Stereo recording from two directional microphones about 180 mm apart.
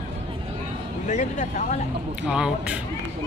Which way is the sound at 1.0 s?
45° left (ahead or behind).